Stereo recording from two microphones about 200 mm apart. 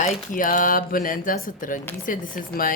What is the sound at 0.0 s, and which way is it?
Speech, 40° left (ahead or behind).